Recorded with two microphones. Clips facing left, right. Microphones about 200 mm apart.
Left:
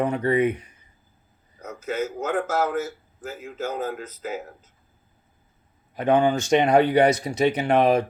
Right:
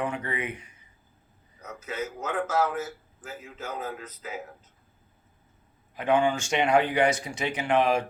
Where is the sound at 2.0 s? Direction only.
90° left.